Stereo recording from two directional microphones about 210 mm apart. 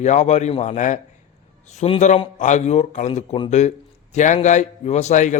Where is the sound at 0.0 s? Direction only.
35° left (ahead or behind).